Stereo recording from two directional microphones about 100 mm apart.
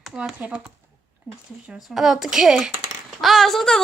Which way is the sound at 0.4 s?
15° right (ahead or behind).